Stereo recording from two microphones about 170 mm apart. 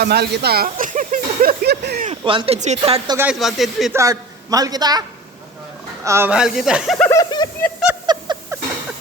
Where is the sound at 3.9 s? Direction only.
20° right (ahead or behind).